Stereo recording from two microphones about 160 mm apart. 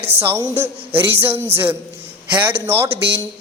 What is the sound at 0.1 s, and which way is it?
Speech, 15° right (ahead or behind).